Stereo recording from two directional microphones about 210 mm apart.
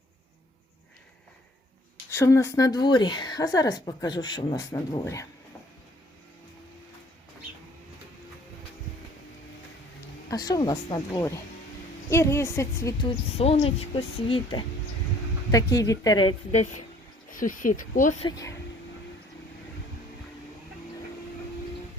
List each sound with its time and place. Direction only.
2.0 s a woman's voice: 15° left (ahead or behind)
10.2 s a woman's voice: 20° left (ahead or behind); by 18.2 s 40° left (ahead or behind)
18.2 s a woman's voice: 20° left (ahead or behind)